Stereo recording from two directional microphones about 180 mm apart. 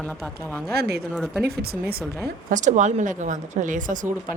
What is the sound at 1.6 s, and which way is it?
Speech, 60° right (ahead or behind).